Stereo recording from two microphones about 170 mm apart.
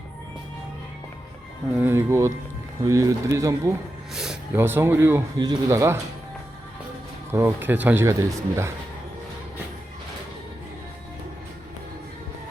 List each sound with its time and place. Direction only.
1.7 s speech: 10° right (ahead or behind)
4.1 s speech: 5° right (ahead or behind)
7.3 s speech: 15° right (ahead or behind)